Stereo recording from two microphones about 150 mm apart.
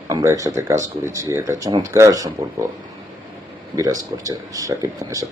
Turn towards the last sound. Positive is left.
turn(degrees=-20)  # may be behind; listen again after turning